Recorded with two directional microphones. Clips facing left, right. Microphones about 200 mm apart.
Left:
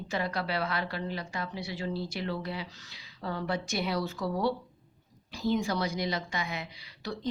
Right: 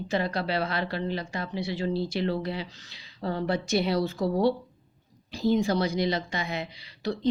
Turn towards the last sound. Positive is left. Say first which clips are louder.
# right 7 dB
turn(degrees=-25)  # may be behind; listen again after turning